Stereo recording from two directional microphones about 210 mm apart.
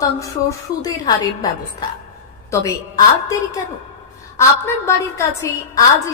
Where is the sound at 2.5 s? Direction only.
15° left (ahead or behind).